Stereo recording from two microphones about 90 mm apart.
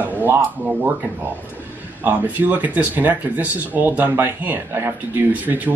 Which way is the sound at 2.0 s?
20° right (ahead or behind).